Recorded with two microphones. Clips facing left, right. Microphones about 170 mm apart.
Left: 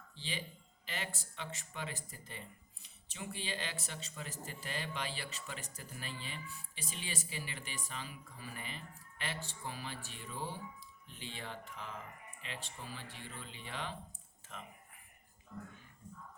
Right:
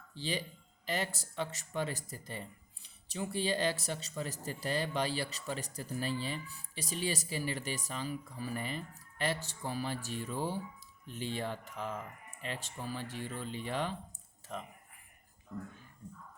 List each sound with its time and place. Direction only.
0.2 s speech: 40° right (ahead or behind)